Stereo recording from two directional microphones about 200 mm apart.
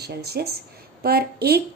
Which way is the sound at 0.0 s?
55° right (ahead or behind).